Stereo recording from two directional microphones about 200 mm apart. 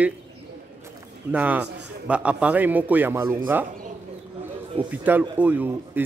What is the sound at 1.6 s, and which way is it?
Speech, 60° right (ahead or behind).